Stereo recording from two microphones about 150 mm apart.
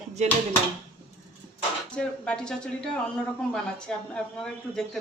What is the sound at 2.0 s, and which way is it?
Speech, 5° left (ahead or behind).